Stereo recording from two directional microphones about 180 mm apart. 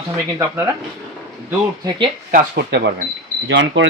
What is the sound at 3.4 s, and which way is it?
Speech, 90° right.